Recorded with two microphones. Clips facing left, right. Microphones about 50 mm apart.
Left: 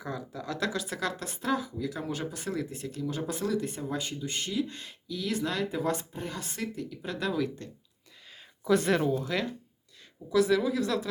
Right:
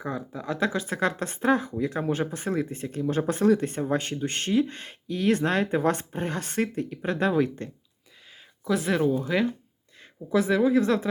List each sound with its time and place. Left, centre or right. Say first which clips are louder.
0.0 s speech: right 4 dB; right
8.6 s speech: right 1 dB; centre
9.2 s speech: right 6 dB; centre